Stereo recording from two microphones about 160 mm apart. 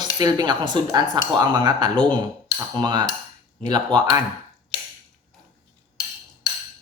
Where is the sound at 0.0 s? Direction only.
25° right (ahead or behind).